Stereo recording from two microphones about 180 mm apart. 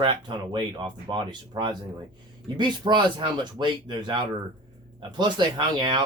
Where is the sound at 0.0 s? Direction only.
25° right (ahead or behind).